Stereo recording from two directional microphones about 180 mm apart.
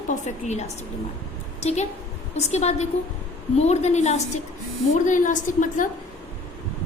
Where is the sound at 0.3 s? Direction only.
40° left (ahead or behind).